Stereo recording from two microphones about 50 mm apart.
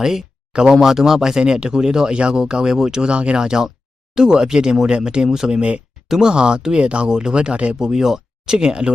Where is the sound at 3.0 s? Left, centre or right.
Centre.